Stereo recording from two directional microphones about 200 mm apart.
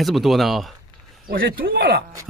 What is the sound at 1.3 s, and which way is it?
Speech, 50° right (ahead or behind).